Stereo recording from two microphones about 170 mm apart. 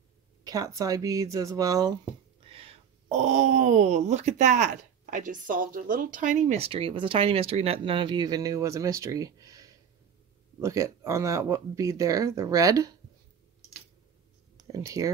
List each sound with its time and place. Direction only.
0.4 s speech: 20° right (ahead or behind)
2.5 s speech: 35° right (ahead or behind); by 12.9 s 20° right (ahead or behind)
14.7 s speech: 20° right (ahead or behind)